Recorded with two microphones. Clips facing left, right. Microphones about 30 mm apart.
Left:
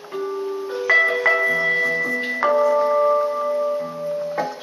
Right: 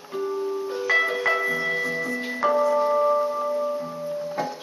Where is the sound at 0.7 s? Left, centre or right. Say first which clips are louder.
Left 6 dB; centre.